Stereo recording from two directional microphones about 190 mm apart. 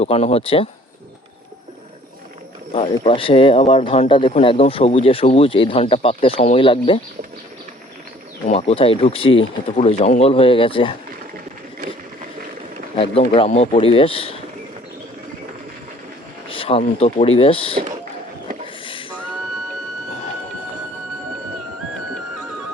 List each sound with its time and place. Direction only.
0.0 s speech: 30° left (ahead or behind)
2.7 s speech: 30° left (ahead or behind)
8.4 s speech: 30° left (ahead or behind)
13.0 s speech: 30° left (ahead or behind)
16.5 s speech: 30° left (ahead or behind)